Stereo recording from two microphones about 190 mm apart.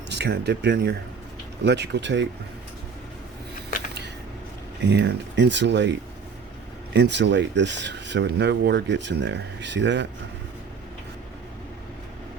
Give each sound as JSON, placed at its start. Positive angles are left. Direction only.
{"t": 0.1, "sound": "speech", "side_deg": -60}
{"t": 3.7, "sound": "a sound", "side_deg": 45}
{"t": 4.8, "sound": "speech", "side_deg": -65}